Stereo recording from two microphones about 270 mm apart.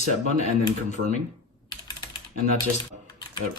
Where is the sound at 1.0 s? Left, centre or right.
Right.